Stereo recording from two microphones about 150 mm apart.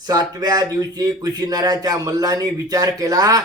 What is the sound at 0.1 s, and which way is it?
Speech, 25° right (ahead or behind).